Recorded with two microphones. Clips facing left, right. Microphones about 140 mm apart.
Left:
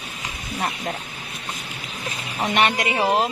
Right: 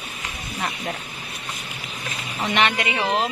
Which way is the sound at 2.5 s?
40° left (ahead or behind).